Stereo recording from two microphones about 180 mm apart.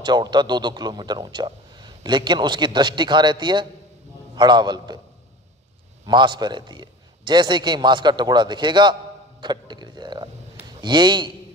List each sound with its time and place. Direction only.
0.0 s a man's voice: 25° right (ahead or behind)
6.0 s a man's voice: 25° right (ahead or behind)
9.4 s a sound: 25° right (ahead or behind)
10.8 s a man's voice: 25° right (ahead or behind)